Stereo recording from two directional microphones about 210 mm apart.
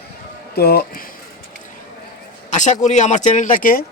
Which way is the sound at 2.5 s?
35° left (ahead or behind).